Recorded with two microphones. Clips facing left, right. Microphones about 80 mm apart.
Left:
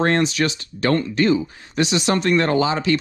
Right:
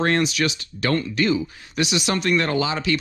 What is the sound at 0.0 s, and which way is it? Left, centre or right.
Speech, left.